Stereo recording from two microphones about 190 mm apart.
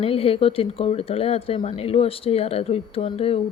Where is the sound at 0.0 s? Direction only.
30° left (ahead or behind).